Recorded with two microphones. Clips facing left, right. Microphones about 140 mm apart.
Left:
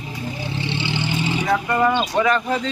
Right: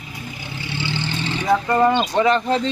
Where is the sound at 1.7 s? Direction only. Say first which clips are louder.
Right 2 dB; 25° right (ahead or behind).